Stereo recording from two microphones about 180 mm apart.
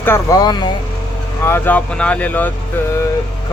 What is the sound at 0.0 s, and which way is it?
Speech, 15° left (ahead or behind).